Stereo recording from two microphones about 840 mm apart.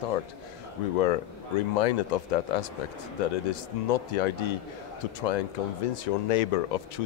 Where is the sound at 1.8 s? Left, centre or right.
Left.